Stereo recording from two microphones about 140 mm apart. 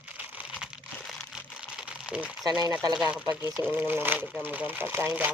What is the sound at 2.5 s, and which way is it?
Speech, 30° right (ahead or behind).